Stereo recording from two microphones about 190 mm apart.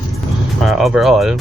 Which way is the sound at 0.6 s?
Centre (ahead or behind).